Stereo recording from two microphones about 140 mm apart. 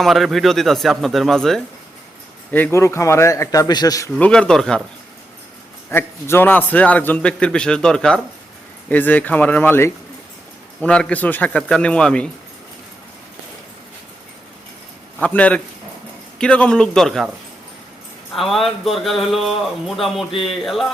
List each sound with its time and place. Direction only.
0.0 s speech: centre (ahead or behind)
2.5 s a man's voice: 15° left (ahead or behind)
4.1 s speech: 5° left (ahead or behind)
5.9 s a man's voice: 15° left (ahead or behind)
15.2 s a man's voice: 10° left (ahead or behind)
18.3 s speech: centre (ahead or behind)